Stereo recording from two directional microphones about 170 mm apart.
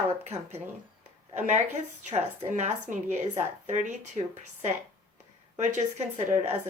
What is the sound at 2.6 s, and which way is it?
Speech, 45° right (ahead or behind).